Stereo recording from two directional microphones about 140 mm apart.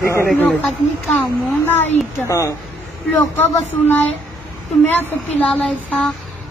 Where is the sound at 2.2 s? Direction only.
20° left (ahead or behind).